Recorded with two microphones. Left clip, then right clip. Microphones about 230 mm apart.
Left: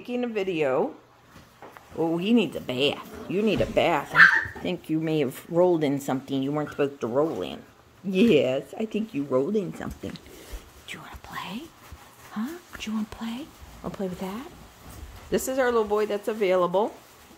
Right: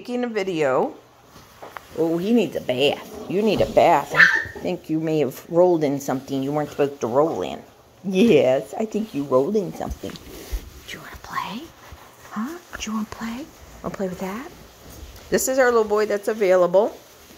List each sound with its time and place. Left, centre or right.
0.0 s speech: centre
2.0 s speech: centre
11.2 s whispering: centre
12.3 s speech: centre